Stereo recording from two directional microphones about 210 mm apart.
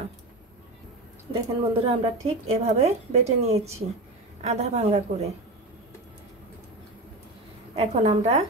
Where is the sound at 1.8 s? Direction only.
30° right (ahead or behind).